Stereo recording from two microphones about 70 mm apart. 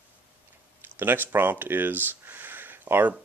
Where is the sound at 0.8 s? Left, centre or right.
Right.